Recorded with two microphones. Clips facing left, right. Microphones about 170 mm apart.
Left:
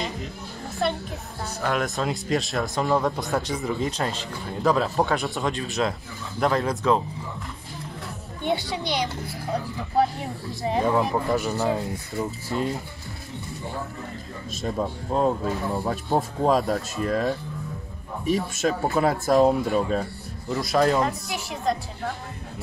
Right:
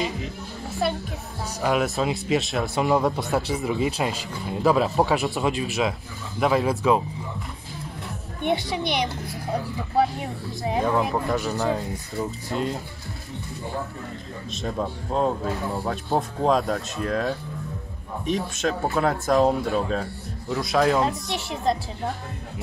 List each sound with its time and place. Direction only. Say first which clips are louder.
0.0 s music: right 3 dB; centre (ahead or behind)
1.6 s speech: right 3 dB; 10° right (ahead or behind)
8.4 s a child's voice: right 2 dB; 20° right (ahead or behind)
10.2 s speech: even; centre (ahead or behind)
14.6 s speech: left 1 dB; 5° left (ahead or behind)